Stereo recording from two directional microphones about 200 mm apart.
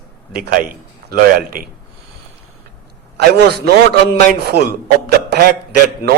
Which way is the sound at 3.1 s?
55° right (ahead or behind).